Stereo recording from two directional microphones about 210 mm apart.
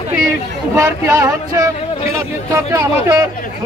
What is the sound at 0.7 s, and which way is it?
Speech, 15° right (ahead or behind).